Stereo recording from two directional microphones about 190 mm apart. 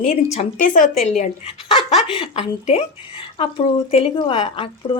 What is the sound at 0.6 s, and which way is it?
A woman's voice, 45° left (ahead or behind).